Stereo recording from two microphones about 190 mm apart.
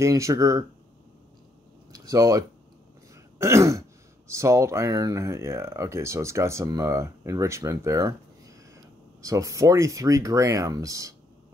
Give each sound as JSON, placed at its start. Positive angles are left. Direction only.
{"t": 0.0, "sound": "speech", "side_deg": -15}
{"t": 1.9, "sound": "speech", "side_deg": -20}
{"t": 9.2, "sound": "speech", "side_deg": -15}